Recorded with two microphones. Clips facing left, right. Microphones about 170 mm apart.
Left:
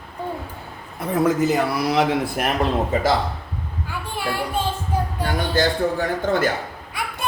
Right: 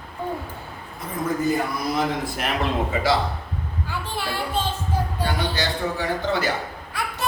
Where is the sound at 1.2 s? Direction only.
90° left.